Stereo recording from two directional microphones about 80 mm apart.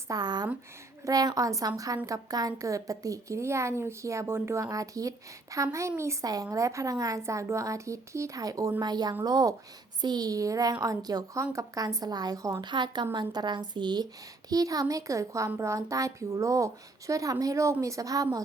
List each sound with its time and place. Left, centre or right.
0.1 s a woman's voice: right
8.8 s a woman's voice: right
12.6 s a woman's voice: right
14.5 s a woman's voice: right